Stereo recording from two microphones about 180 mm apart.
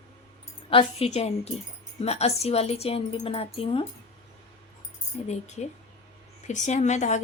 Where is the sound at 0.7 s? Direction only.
30° left (ahead or behind).